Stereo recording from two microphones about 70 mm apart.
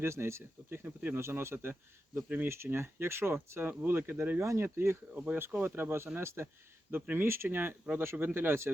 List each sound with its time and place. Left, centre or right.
0.0 s speech: right
5.1 s speech: right